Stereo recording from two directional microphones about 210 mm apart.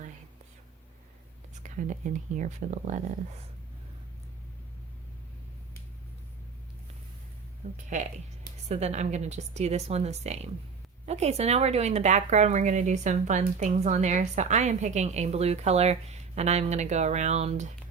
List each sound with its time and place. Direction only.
1.6 s a woman's voice: 35° right (ahead or behind)
7.6 s a woman's voice: 30° right (ahead or behind)